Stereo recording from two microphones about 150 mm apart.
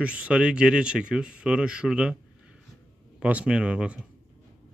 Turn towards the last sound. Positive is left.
turn(degrees=-5)  # may be behind; listen again after turning